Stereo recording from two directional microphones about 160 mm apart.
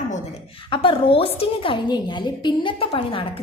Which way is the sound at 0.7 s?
35° left (ahead or behind).